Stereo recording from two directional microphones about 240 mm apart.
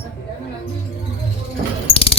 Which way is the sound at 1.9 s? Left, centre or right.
Left.